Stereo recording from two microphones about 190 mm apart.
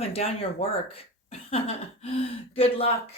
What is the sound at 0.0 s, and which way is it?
Speech, 30° left (ahead or behind).